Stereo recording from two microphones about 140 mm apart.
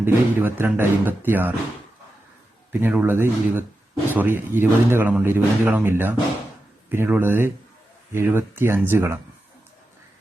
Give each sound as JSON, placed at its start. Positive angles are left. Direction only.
{"t": 0.0, "sound": "speech", "side_deg": -15}
{"t": 2.8, "sound": "speech", "side_deg": -10}